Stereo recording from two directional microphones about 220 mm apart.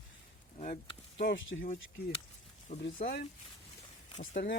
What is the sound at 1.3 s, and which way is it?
Speech, 60° left (ahead or behind).